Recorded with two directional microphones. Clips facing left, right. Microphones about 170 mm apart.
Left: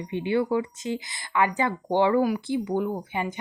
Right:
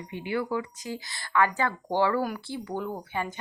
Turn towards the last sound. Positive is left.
turn(degrees=15)  # may be behind; listen again after turning